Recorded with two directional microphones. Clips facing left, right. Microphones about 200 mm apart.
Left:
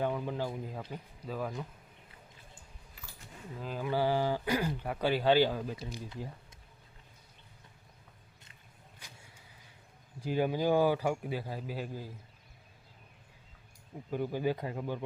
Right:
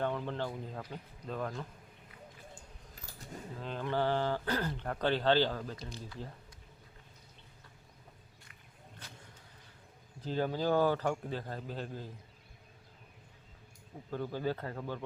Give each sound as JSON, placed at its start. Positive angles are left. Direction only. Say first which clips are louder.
{"t": 0.0, "sound": "speech", "louder": "left 2 dB", "side_deg": 10}
{"t": 3.0, "sound": "keys jangling", "louder": "left 1 dB", "side_deg": -40}
{"t": 3.6, "sound": "speech", "louder": "left 2 dB", "side_deg": 5}
{"t": 9.0, "sound": "a sound", "louder": "right 3 dB", "side_deg": 10}
{"t": 10.2, "sound": "speech", "louder": "left 3 dB", "side_deg": 10}
{"t": 14.1, "sound": "speech", "louder": "left 3 dB", "side_deg": 15}